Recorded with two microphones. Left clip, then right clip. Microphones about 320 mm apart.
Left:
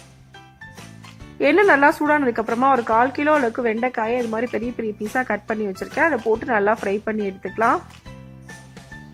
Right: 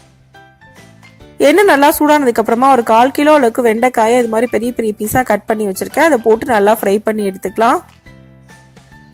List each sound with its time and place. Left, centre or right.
1.4 s speech: centre